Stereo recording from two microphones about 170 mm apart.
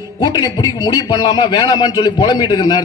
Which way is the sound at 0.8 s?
20° left (ahead or behind).